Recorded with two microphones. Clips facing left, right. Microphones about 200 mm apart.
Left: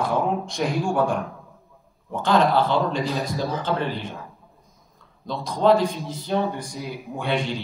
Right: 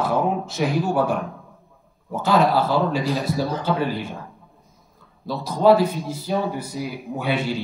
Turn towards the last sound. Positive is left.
turn(degrees=-5)  # may be behind; listen again after turning